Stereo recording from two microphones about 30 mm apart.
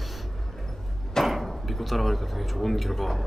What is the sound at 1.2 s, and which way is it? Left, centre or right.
Speech, centre.